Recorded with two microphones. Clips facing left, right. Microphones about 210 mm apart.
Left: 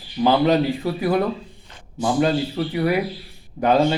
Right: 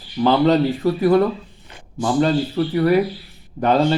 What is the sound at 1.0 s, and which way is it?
A man's voice, 10° left (ahead or behind).